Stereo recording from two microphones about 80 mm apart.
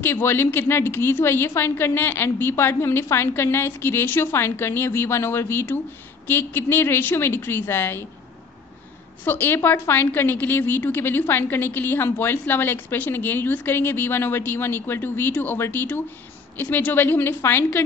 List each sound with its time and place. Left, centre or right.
0.0 s a woman's voice: left
9.2 s a woman's voice: left